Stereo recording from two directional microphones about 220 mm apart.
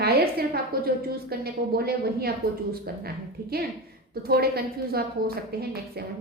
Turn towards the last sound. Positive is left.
turn(degrees=-45)  # may be behind; listen again after turning